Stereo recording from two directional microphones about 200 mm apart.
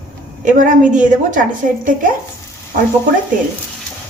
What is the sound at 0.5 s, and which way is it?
A woman's voice, 40° right (ahead or behind).